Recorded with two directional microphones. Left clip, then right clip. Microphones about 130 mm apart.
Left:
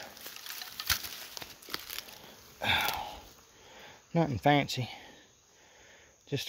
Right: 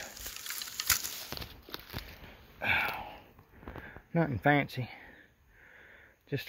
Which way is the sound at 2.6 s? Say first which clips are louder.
Left 1 dB; 40° left (ahead or behind).